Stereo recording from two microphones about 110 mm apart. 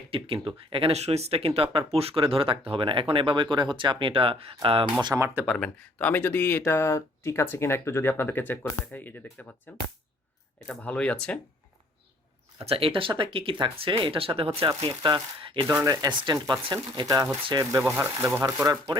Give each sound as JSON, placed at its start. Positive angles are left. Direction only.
{"t": 0.4, "sound": "speech", "side_deg": -55}
{"t": 5.0, "sound": "speech", "side_deg": -30}
{"t": 5.5, "sound": "speech", "side_deg": 10}
{"t": 12.6, "sound": "speech", "side_deg": -60}
{"t": 14.8, "sound": "speech", "side_deg": -40}
{"t": 18.6, "sound": "speech", "side_deg": -30}